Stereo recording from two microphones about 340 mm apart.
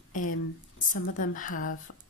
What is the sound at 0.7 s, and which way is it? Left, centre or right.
Speech, left.